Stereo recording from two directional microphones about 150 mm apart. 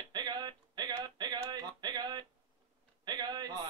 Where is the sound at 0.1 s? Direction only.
30° right (ahead or behind).